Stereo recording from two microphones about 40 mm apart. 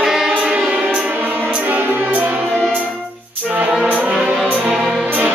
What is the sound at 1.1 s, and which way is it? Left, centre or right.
Music, right.